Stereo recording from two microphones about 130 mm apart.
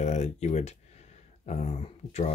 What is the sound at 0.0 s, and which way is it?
Speech, 60° left (ahead or behind).